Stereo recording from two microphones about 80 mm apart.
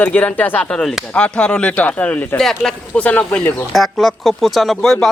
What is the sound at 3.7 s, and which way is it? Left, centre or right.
Speech, centre.